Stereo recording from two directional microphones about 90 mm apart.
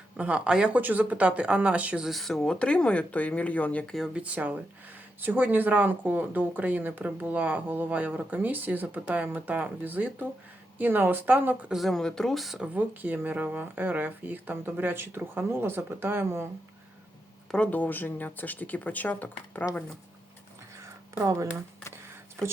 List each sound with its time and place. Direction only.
0.2 s speech: 15° right (ahead or behind)
2.0 s speech: centre (ahead or behind)
3.9 s speech: 5° right (ahead or behind)
4.2 s speech: 15° right (ahead or behind)
11.7 s speech: centre (ahead or behind)
12.7 s speech: 20° right (ahead or behind)
17.5 s speech: 15° left (ahead or behind)